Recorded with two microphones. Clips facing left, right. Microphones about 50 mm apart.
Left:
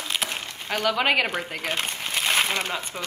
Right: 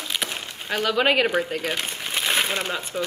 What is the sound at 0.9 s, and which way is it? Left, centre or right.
Speech, centre.